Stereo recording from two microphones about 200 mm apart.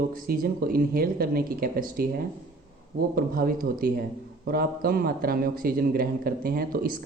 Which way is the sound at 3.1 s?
45° right (ahead or behind).